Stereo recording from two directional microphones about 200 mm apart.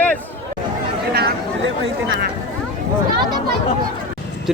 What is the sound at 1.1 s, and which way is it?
Chatter, 60° right (ahead or behind).